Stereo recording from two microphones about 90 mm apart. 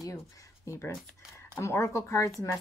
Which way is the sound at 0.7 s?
30° left (ahead or behind).